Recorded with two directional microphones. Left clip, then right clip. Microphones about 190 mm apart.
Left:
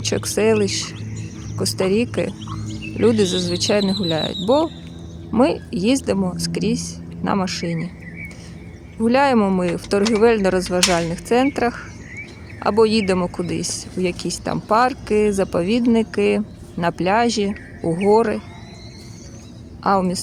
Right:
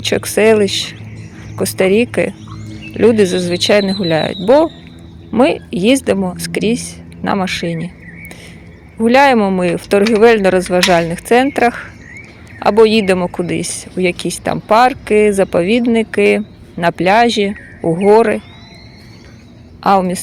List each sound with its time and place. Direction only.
0.0 s speech: 15° right (ahead or behind)
9.0 s speech: 15° right (ahead or behind)